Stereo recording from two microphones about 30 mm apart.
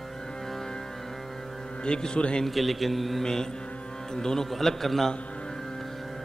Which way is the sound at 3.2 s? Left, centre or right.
Left.